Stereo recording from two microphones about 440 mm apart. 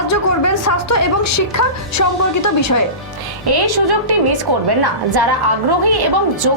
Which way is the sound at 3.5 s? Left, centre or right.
Right.